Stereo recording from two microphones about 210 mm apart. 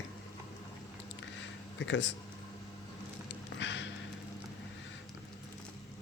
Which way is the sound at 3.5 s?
60° left (ahead or behind).